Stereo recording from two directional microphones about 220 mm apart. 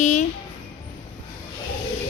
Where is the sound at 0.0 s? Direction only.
30° left (ahead or behind).